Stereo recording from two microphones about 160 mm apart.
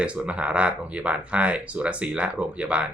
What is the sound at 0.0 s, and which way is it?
Speech, 5° right (ahead or behind).